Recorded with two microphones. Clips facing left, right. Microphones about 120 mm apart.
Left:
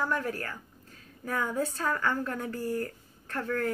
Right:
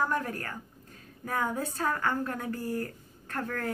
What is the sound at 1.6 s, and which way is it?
A woman's voice, 35° right (ahead or behind).